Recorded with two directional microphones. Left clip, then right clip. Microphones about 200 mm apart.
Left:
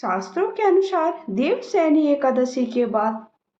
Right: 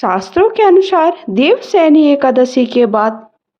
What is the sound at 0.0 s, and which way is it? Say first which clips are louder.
Speech: right 11 dB; 45° right (ahead or behind).